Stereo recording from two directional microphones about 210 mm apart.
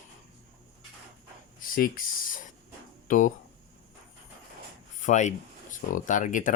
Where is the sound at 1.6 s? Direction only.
40° left (ahead or behind).